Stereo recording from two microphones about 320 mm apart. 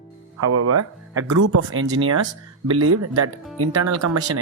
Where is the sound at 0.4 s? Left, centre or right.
Right.